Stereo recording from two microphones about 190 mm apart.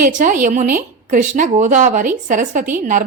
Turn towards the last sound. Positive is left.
turn(degrees=-40)  # may be behind; listen again after turning